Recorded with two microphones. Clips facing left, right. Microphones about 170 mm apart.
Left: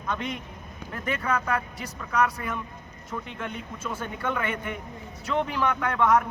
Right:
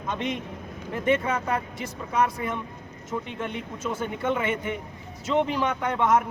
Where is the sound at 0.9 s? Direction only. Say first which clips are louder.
Right 4 dB; 25° right (ahead or behind).